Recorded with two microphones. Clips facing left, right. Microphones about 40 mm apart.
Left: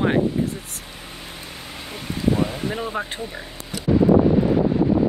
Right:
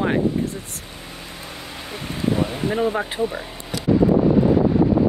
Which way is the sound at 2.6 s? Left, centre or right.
Right.